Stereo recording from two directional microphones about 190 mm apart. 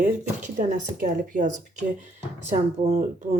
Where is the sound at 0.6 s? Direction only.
45° right (ahead or behind).